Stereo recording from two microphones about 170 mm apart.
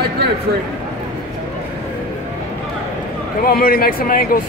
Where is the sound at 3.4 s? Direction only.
60° left (ahead or behind).